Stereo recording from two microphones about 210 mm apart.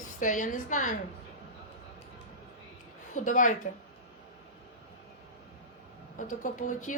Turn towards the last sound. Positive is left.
turn(degrees=40)  # may be behind; listen again after turning